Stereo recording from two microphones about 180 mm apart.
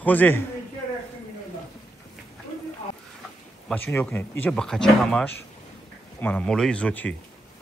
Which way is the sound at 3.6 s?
10° left (ahead or behind).